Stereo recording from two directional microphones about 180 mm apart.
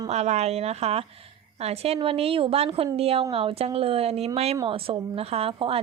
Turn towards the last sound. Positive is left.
turn(degrees=-30)  # may be behind; listen again after turning